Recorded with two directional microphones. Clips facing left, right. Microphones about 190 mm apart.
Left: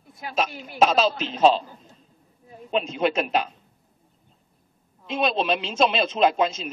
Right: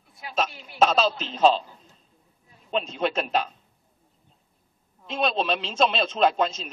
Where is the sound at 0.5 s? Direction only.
50° left (ahead or behind).